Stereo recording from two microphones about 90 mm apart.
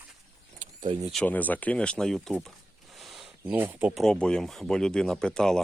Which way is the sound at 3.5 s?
20° right (ahead or behind).